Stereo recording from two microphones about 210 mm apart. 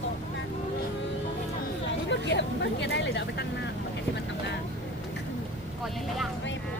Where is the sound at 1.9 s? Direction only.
60° left (ahead or behind).